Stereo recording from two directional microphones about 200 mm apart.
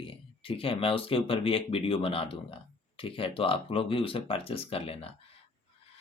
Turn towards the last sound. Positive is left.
turn(degrees=30)  # may be behind; listen again after turning